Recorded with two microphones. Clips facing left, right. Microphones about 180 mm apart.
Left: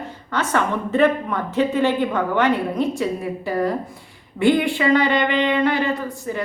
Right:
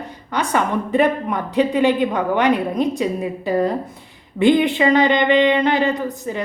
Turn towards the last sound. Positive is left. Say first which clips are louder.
# right 2 dB
turn(degrees=-20)  # may be behind; listen again after turning